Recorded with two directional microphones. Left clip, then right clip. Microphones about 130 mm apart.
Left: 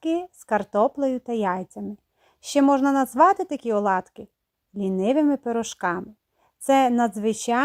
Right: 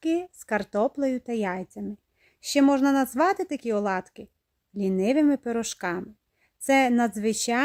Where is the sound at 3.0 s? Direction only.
10° right (ahead or behind).